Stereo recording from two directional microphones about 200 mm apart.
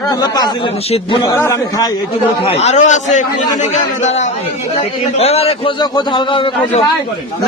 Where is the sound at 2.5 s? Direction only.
35° left (ahead or behind).